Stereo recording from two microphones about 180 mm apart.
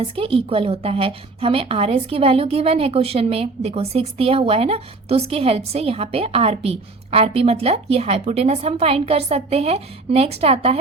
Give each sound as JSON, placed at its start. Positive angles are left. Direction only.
{"t": 0.0, "sound": "a woman's voice", "side_deg": -30}